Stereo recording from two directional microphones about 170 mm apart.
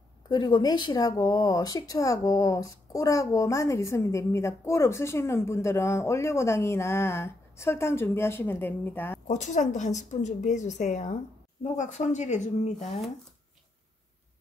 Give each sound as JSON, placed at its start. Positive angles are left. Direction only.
{"t": 0.3, "sound": "speech", "side_deg": 25}
{"t": 9.3, "sound": "a woman's voice", "side_deg": 45}